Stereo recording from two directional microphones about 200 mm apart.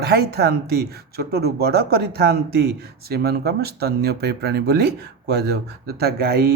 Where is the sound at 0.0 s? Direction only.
50° right (ahead or behind).